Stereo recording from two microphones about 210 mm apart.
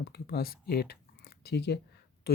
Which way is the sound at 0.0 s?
50° left (ahead or behind).